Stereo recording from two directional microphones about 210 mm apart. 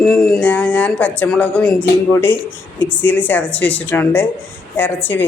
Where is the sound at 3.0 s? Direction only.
10° left (ahead or behind).